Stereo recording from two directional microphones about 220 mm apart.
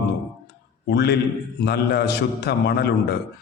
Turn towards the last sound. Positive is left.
turn(degrees=45)  # may be behind; listen again after turning